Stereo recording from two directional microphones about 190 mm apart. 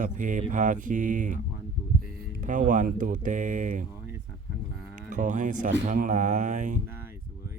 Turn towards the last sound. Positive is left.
turn(degrees=-40)  # may be behind; listen again after turning